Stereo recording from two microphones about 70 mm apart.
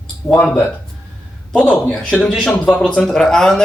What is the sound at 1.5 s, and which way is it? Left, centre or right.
Speech, centre.